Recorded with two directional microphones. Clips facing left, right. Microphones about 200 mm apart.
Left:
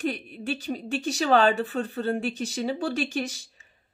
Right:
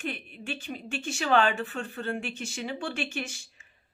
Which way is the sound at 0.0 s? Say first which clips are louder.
Left 7 dB; 35° left (ahead or behind).